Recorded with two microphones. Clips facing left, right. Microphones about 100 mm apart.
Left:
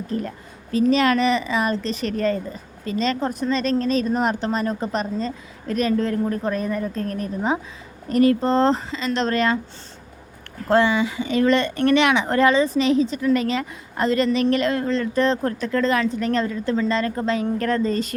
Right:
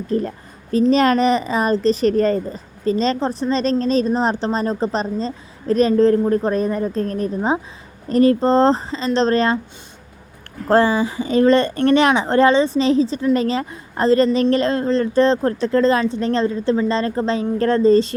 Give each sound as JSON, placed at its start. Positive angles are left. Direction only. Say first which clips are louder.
{"t": 0.1, "sound": "a woman's voice", "louder": "right 8 dB", "side_deg": -35}
{"t": 10.7, "sound": "a woman's voice", "louder": "right 3 dB", "side_deg": -35}